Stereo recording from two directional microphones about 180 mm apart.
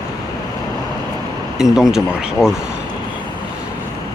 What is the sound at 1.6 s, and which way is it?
Speech, centre (ahead or behind).